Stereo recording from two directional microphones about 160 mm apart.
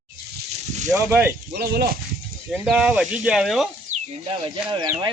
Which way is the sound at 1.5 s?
70° right (ahead or behind).